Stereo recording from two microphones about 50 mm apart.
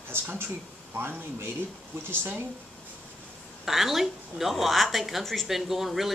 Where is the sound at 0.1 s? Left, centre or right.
Right.